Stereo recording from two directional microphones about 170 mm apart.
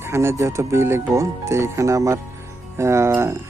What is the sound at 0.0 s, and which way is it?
Speech, 15° right (ahead or behind).